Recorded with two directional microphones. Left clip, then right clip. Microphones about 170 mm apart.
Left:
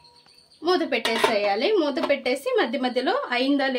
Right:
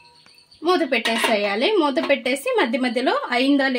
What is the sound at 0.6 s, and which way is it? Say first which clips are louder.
Speech: right 3 dB; 45° right (ahead or behind).